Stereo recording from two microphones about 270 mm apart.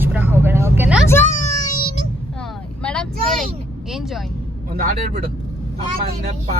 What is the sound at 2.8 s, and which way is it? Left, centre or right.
Vehicle, centre.